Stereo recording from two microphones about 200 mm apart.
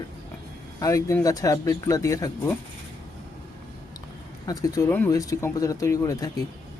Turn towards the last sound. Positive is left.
turn(degrees=15)  # may be behind; listen again after turning